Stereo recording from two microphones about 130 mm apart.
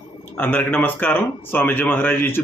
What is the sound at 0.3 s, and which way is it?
Speech, 15° left (ahead or behind).